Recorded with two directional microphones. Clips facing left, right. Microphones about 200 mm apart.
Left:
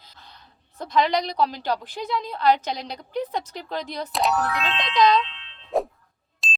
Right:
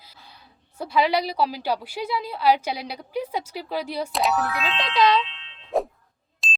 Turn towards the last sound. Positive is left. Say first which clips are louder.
# even
turn(degrees=0)  # may be behind; listen again after turning